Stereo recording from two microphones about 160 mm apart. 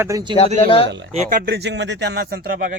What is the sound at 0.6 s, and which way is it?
Speech, 35° left (ahead or behind).